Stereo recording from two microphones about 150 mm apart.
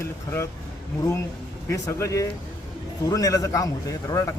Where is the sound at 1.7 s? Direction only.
20° left (ahead or behind).